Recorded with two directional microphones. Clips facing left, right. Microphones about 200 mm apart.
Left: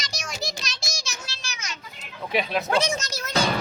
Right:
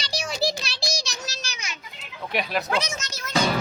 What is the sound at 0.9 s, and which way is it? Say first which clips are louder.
Child singing: right 5 dB; 35° right (ahead or behind).